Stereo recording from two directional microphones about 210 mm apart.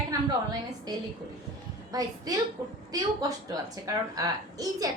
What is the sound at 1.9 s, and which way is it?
A woman's voice, 15° right (ahead or behind).